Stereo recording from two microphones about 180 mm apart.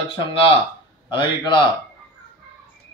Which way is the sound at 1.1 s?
25° left (ahead or behind).